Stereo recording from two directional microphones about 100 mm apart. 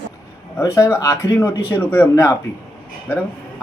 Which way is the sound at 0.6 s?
30° left (ahead or behind).